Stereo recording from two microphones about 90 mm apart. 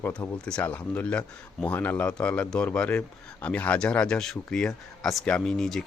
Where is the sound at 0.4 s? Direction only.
15° left (ahead or behind).